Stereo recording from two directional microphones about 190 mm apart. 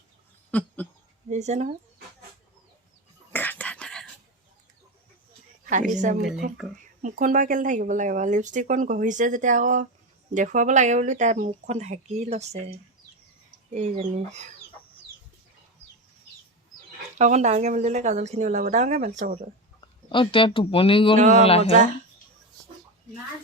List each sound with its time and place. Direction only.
0.5 s a sound: 5° left (ahead or behind)
1.3 s speech: 35° right (ahead or behind)
3.3 s whispering: 10° left (ahead or behind)
5.9 s speech: 40° right (ahead or behind)
17.2 s speech: 35° right (ahead or behind)
20.1 s speech: 25° left (ahead or behind)
21.2 s speech: 40° right (ahead or behind)
21.4 s speech: 30° left (ahead or behind)